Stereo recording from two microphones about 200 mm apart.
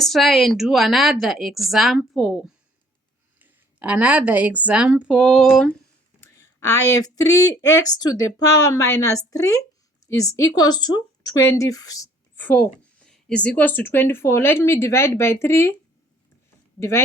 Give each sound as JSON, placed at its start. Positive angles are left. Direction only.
{"t": 0.0, "sound": "a woman's voice", "side_deg": 0}
{"t": 3.3, "sound": "a woman's voice", "side_deg": -10}